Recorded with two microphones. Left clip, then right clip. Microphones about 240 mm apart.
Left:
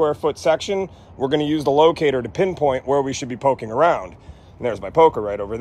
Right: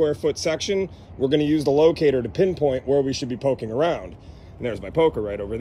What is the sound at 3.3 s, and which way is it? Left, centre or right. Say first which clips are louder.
Speech: left 7 dB; left.